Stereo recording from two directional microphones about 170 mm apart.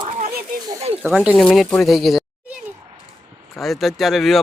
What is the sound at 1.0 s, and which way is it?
Speech, 5° right (ahead or behind).